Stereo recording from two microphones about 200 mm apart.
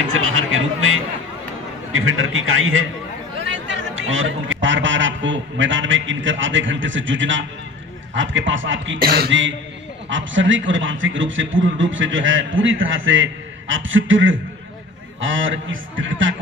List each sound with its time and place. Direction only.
0.1 s a sound: 90° right
1.9 s a man's voice: 80° right
9.0 s beatboxing: 50° right (ahead or behind)
10.0 s a man's voice: 70° right (ahead or behind)